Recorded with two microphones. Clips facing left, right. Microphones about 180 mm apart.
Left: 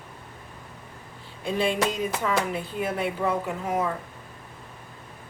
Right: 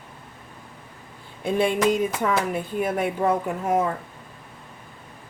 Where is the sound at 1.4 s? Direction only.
50° right (ahead or behind).